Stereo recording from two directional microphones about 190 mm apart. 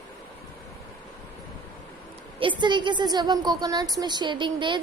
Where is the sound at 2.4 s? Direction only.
25° right (ahead or behind).